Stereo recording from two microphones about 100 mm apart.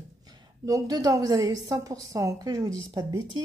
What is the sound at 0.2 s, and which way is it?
Speech, 40° right (ahead or behind).